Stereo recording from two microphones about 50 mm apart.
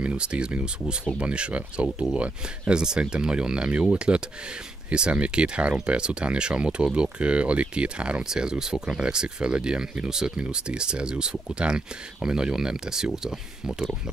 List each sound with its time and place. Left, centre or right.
0.0 s speech: right